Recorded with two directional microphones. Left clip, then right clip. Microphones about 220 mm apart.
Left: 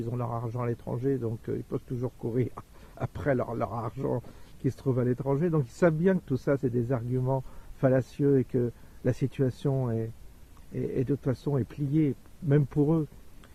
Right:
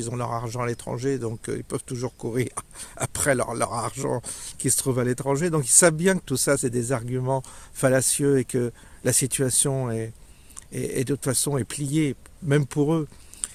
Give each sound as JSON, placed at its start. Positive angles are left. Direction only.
{"t": 0.0, "sound": "speech", "side_deg": -15}